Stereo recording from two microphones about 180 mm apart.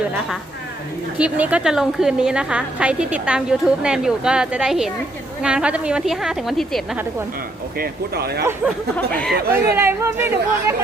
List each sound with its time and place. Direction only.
1.2 s a woman's voice: 5° right (ahead or behind)
7.8 s speech: 60° right (ahead or behind)
8.6 s a woman's voice: 5° left (ahead or behind)
9.3 s speech: 60° right (ahead or behind)
9.7 s speech: 15° right (ahead or behind)